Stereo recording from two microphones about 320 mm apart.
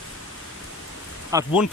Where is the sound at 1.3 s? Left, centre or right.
Centre.